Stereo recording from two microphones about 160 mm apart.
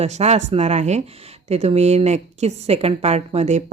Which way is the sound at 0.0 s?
45° right (ahead or behind).